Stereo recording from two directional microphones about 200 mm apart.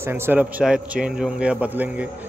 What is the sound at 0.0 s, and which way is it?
A man's voice, 10° right (ahead or behind).